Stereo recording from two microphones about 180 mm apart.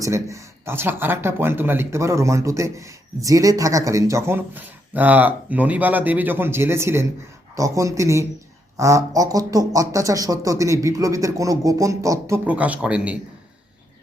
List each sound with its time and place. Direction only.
0.0 s speech: 15° right (ahead or behind)